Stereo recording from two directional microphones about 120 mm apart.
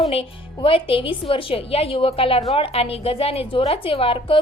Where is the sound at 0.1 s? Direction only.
50° left (ahead or behind).